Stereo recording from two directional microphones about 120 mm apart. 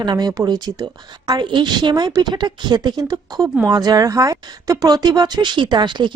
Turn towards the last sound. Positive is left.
turn(degrees=-40)  # may be behind; listen again after turning